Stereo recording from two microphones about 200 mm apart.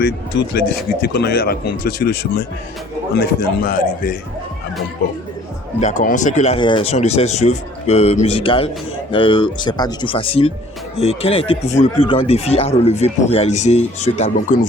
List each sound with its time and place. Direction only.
0.0 s speech: 55° left (ahead or behind)
5.8 s speech: 40° left (ahead or behind)